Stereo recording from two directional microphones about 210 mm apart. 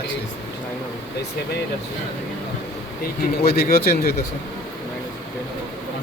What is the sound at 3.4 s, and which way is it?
Speech, 45° left (ahead or behind).